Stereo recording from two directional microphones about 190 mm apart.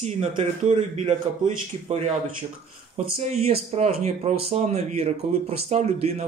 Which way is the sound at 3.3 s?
35° right (ahead or behind).